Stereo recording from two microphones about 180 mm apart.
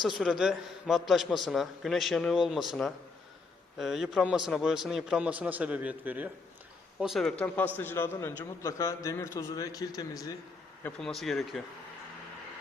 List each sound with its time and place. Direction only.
0.2 s a man's voice: centre (ahead or behind); by 10.3 s 20° left (ahead or behind)
10.8 s a man's voice: centre (ahead or behind)